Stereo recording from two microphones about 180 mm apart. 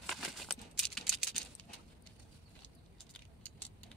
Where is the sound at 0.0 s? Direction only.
Centre (ahead or behind).